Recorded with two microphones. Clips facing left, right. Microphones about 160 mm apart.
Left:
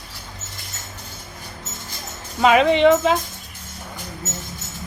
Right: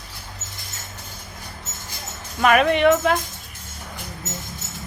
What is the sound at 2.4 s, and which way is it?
Speech, 20° left (ahead or behind).